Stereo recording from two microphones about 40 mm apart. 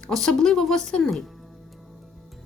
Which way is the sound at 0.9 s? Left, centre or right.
Left.